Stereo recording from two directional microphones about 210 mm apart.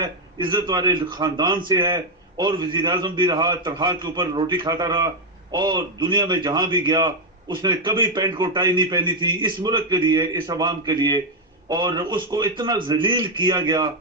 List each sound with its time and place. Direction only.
0.0 s a man's voice: 20° right (ahead or behind)